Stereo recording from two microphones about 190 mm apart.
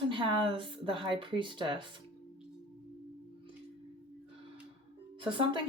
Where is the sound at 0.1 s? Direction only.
25° right (ahead or behind).